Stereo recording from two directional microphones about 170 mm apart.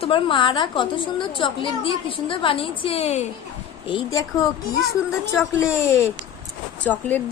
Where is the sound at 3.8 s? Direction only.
25° left (ahead or behind).